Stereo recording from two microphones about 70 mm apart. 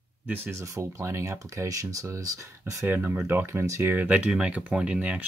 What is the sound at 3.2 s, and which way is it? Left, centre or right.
Speech, right.